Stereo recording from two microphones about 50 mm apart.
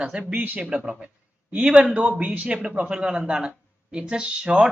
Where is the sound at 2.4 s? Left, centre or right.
Centre.